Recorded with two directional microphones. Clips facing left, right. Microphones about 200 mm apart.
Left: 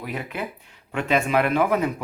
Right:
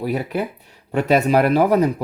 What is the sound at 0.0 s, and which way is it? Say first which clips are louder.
Speech: right 8 dB; 35° right (ahead or behind).